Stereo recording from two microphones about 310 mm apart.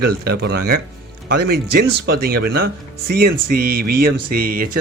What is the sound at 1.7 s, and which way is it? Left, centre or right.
Speech, right.